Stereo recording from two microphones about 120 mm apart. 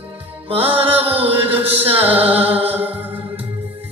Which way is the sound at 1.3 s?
15° right (ahead or behind).